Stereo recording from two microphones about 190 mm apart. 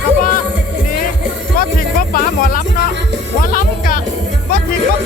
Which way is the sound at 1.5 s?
50° left (ahead or behind).